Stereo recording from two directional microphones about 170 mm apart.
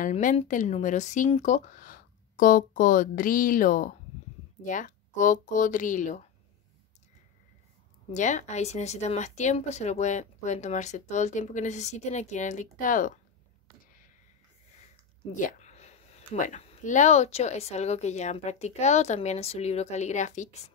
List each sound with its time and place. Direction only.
0.0 s speech: 50° left (ahead or behind)
8.1 s speech: 45° left (ahead or behind)
15.3 s speech: 45° left (ahead or behind)